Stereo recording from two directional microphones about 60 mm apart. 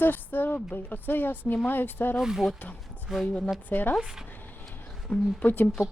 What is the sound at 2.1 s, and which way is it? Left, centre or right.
Speech, centre.